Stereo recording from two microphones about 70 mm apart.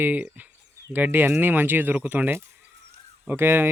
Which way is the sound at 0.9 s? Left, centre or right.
Right.